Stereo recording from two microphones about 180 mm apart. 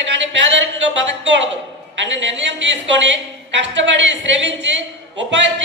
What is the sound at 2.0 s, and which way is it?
Speech, 90° right.